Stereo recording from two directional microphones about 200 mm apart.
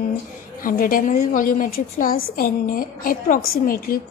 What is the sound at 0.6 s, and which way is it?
A woman's voice, 45° left (ahead or behind).